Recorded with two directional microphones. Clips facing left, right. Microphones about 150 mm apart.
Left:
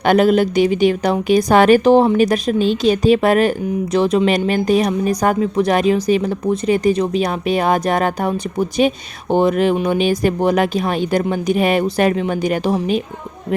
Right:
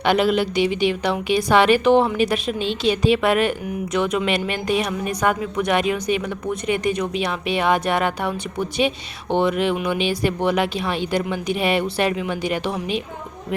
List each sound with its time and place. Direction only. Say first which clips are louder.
0.0 s a woman's voice: left 5 dB; 45° left (ahead or behind)